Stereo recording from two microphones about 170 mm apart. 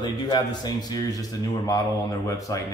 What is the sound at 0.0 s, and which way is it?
Speech, 25° left (ahead or behind).